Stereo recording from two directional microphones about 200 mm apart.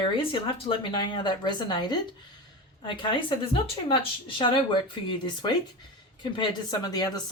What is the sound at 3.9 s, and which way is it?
Speech, 25° left (ahead or behind).